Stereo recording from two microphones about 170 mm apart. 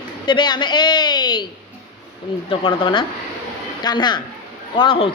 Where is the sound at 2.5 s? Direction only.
30° left (ahead or behind).